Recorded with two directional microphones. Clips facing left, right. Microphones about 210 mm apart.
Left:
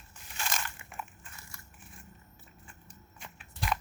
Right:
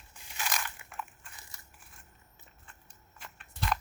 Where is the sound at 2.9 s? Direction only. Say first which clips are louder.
Left 1 dB; centre (ahead or behind).